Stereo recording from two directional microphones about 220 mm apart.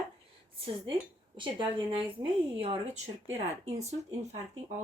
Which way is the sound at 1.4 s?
20° right (ahead or behind).